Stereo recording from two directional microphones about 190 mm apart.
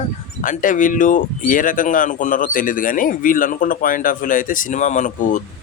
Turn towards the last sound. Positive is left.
turn(degrees=40)  # may be behind; listen again after turning